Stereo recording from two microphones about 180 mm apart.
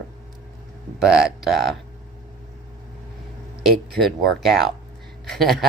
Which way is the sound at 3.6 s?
Centre (ahead or behind).